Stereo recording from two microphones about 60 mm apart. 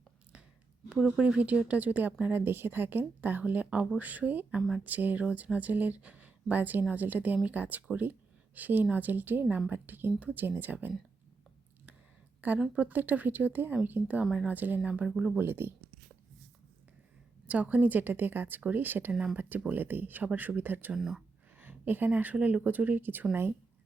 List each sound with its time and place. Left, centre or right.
0.9 s speech: centre
1.2 s speech: right
12.7 s speech: right
15.4 s speech: right
17.4 s speech: right
20.9 s speech: centre
21.6 s speech: right